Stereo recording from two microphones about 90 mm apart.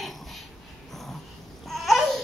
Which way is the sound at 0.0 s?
Centre (ahead or behind).